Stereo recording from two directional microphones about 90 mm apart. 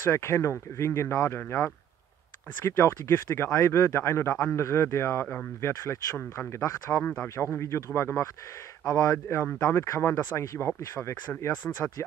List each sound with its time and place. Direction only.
0.0 s speech: 30° left (ahead or behind)
2.6 s speech: 30° left (ahead or behind)
5.7 s speech: 30° left (ahead or behind)
7.0 s speech: 20° left (ahead or behind)
7.5 s speech: 30° left (ahead or behind)
9.4 s speech: 20° left (ahead or behind)